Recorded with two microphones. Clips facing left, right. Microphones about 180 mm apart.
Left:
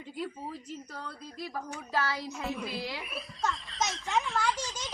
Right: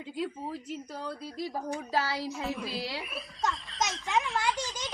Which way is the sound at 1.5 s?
35° right (ahead or behind).